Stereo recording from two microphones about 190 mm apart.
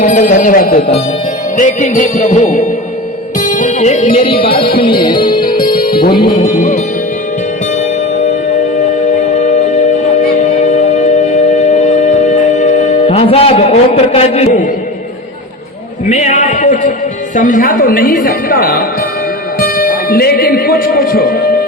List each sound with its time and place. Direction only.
0.0 s a woman's voice: 40° left (ahead or behind)
3.3 s music: 40° left (ahead or behind)
4.8 s music: 25° left (ahead or behind)
9.3 s music: 40° left (ahead or behind)
16.0 s a sound: 40° left (ahead or behind)
17.3 s a woman's voice: 45° left (ahead or behind)
19.5 s music: 50° left (ahead or behind)